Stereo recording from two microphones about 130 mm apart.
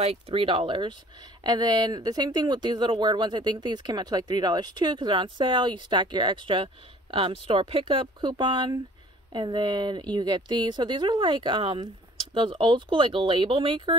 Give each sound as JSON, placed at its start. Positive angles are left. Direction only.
{"t": 0.0, "sound": "speech", "side_deg": -50}